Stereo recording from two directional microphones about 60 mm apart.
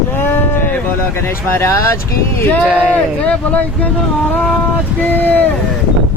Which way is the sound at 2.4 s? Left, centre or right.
Left.